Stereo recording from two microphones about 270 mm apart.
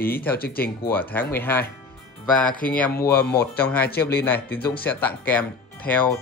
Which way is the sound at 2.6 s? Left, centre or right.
Centre.